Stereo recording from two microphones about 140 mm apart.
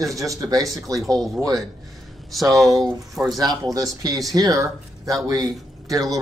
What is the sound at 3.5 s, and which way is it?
Speech, 25° right (ahead or behind).